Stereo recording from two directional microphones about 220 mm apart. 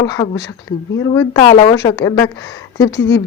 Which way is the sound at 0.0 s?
15° left (ahead or behind).